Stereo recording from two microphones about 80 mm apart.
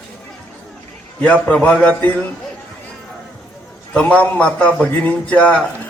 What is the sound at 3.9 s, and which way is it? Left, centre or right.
A man's voice, centre.